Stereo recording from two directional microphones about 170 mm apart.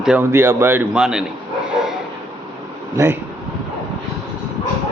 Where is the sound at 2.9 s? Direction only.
15° right (ahead or behind).